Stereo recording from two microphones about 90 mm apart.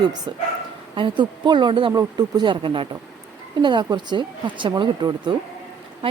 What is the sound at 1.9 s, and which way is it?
Speech, 55° right (ahead or behind).